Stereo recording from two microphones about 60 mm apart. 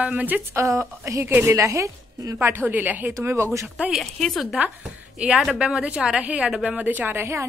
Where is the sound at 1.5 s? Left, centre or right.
Right.